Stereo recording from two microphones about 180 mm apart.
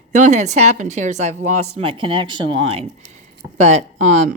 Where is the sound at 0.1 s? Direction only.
40° right (ahead or behind).